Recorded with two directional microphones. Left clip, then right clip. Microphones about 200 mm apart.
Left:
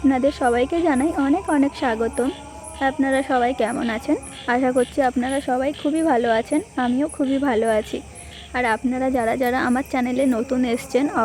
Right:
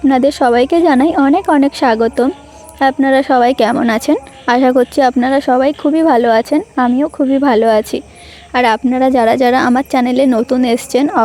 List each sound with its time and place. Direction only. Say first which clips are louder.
0.1 s a woman's voice: right 10 dB; 40° right (ahead or behind)